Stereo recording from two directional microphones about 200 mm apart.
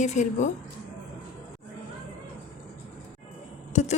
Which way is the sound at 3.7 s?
35° left (ahead or behind).